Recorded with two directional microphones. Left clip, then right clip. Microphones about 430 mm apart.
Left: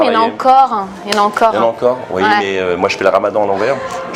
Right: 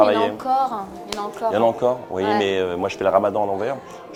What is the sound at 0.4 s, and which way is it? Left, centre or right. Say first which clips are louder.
Speech: left 11 dB; left.